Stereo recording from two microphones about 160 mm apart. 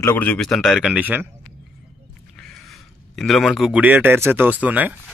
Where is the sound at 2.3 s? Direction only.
Centre (ahead or behind).